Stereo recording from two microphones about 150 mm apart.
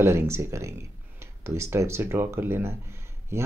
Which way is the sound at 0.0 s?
15° right (ahead or behind).